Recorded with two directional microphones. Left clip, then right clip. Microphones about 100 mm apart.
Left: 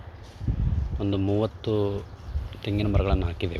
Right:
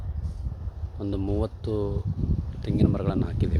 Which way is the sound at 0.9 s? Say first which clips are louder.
Left 3 dB; 30° right (ahead or behind).